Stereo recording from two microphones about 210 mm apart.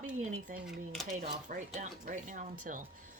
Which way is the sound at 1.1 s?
35° right (ahead or behind).